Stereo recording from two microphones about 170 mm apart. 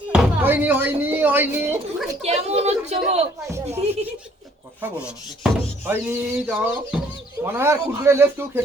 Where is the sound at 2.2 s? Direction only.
40° right (ahead or behind).